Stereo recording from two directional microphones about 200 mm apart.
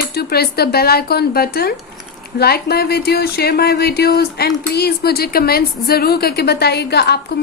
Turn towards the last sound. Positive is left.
turn(degrees=55)  # may be behind; listen again after turning